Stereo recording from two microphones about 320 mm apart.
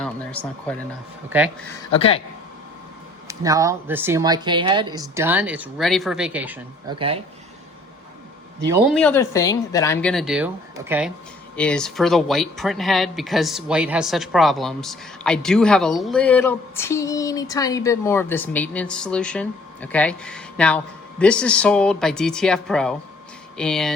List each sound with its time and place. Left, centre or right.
0.0 s a sound: centre
1.3 s speech: centre
1.9 s speech: centre
3.2 s speech: centre
8.9 s speech: centre